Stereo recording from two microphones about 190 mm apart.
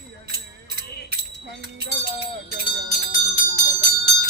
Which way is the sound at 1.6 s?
55° right (ahead or behind).